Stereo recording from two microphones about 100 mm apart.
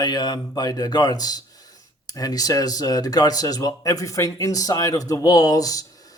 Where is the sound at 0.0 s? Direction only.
45° left (ahead or behind).